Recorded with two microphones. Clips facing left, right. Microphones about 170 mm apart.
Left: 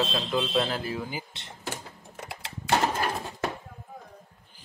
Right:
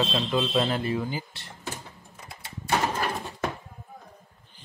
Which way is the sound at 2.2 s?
90° left.